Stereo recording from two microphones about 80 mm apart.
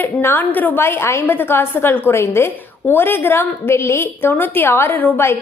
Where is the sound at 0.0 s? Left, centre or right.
Left.